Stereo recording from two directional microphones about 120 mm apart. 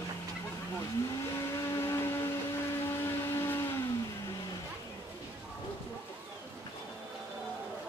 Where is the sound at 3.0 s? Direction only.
20° left (ahead or behind).